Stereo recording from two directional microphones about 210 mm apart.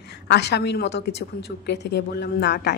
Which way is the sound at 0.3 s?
55° left (ahead or behind).